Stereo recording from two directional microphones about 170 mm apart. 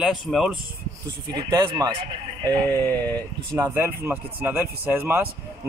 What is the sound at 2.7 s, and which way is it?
Speech, 10° left (ahead or behind).